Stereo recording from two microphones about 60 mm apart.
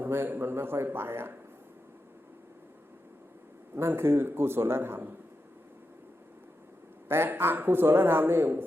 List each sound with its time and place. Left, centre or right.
0.0 s a man's voice: right
3.8 s a man's voice: right
7.1 s a man's voice: right